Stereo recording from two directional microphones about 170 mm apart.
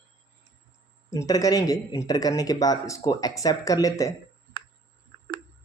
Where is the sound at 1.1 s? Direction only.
20° left (ahead or behind).